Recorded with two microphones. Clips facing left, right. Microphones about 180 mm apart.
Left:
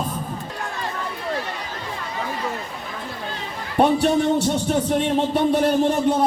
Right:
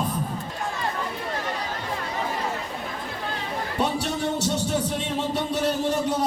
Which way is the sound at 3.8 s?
55° left (ahead or behind).